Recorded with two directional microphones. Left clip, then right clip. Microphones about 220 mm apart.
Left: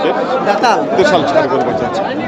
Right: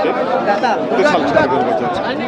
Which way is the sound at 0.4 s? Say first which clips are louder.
Left 6 dB; 50° left (ahead or behind).